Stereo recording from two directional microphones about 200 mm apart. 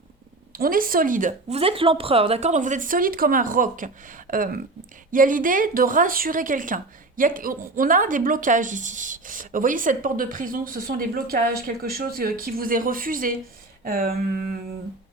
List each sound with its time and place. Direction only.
0.5 s speech: 45° right (ahead or behind)